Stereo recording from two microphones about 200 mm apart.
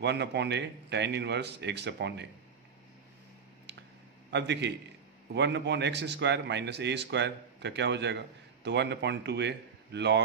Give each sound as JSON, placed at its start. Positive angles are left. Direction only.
{"t": 0.0, "sound": "speech", "side_deg": -60}
{"t": 4.3, "sound": "speech", "side_deg": -60}